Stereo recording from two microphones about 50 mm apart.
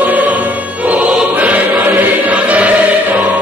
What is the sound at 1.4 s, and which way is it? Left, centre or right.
Choir, right.